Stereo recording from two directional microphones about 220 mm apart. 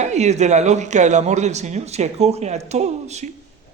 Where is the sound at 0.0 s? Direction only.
30° right (ahead or behind).